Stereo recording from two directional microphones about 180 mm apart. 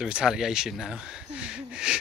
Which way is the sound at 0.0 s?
5° right (ahead or behind).